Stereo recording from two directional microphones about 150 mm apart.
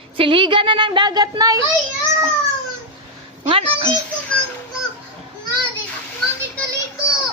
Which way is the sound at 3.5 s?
40° right (ahead or behind).